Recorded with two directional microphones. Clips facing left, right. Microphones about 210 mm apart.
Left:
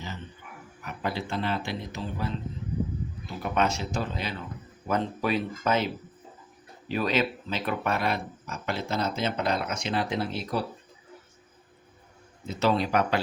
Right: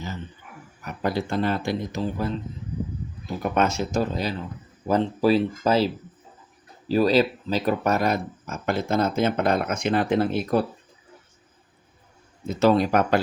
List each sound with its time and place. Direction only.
0.9 s speech: 45° right (ahead or behind)
3.4 s speech: 45° right (ahead or behind)
12.5 s speech: 45° right (ahead or behind)